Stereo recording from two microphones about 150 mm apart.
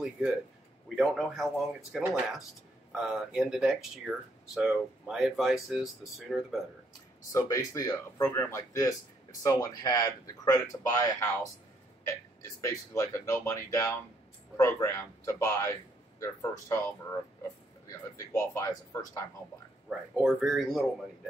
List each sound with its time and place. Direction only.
0.9 s speech: centre (ahead or behind)
7.3 s speech: 20° left (ahead or behind)
19.9 s speech: 5° right (ahead or behind)